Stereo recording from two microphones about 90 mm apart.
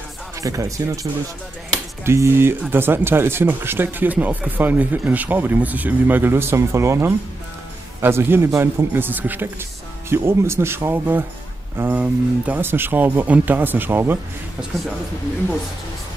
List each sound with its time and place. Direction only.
0.4 s speech: 35° right (ahead or behind)
2.0 s speech: 30° right (ahead or behind)